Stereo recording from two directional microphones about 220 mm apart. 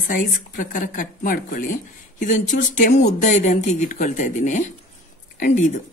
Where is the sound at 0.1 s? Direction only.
35° left (ahead or behind).